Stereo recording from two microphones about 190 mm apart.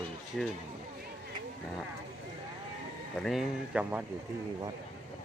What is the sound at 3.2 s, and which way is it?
Speech, centre (ahead or behind).